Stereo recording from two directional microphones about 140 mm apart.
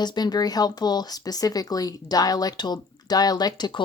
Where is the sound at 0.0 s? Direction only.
30° left (ahead or behind).